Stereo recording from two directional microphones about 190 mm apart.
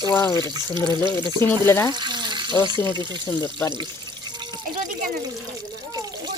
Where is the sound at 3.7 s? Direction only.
25° right (ahead or behind).